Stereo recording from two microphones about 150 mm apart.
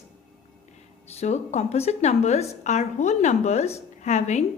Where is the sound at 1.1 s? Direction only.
45° left (ahead or behind).